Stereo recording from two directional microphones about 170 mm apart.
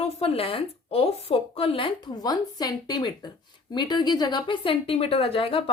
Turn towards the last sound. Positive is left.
turn(degrees=30)  # may be behind; listen again after turning